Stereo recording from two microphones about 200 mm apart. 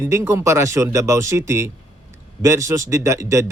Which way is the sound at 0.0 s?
15° right (ahead or behind).